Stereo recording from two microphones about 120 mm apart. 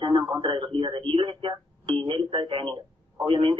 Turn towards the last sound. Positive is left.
turn(degrees=-45)  # may be behind; listen again after turning